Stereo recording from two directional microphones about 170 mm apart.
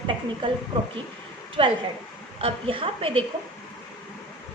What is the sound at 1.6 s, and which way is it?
Speech, 30° right (ahead or behind).